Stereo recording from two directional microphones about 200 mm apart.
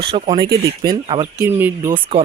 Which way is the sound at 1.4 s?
10° right (ahead or behind).